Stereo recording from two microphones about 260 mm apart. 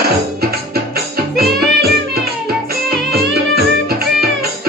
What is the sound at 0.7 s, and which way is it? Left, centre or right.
Music, right.